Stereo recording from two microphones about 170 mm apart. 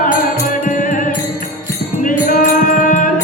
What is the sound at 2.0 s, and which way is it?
Music, 50° left (ahead or behind).